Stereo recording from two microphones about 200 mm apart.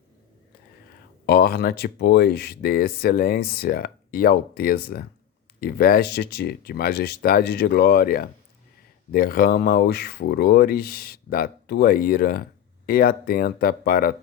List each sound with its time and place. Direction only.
1.3 s speech: 50° left (ahead or behind)